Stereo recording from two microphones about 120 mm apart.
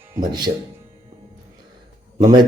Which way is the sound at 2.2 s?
35° right (ahead or behind).